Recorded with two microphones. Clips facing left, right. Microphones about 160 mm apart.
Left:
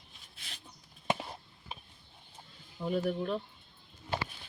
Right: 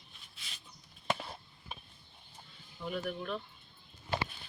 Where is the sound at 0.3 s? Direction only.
60° left (ahead or behind).